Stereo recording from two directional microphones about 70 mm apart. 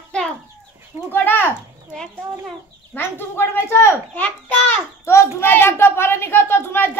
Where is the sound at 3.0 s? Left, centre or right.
Left.